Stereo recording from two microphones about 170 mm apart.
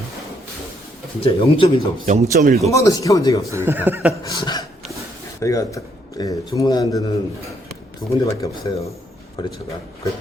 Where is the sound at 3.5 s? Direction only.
15° right (ahead or behind).